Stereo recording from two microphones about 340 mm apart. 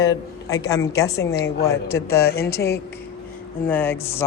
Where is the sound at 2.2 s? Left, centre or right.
Left.